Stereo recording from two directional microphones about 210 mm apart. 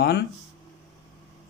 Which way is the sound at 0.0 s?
50° left (ahead or behind).